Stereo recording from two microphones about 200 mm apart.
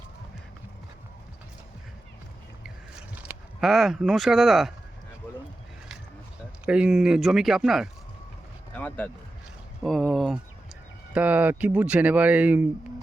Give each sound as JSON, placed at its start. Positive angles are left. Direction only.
{"t": 3.2, "sound": "speech", "side_deg": -5}
{"t": 6.7, "sound": "speech", "side_deg": -5}
{"t": 8.7, "sound": "vehicle", "side_deg": 10}
{"t": 9.8, "sound": "speech", "side_deg": 0}